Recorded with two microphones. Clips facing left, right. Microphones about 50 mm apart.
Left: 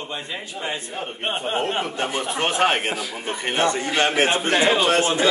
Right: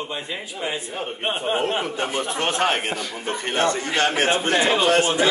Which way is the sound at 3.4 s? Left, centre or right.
Centre.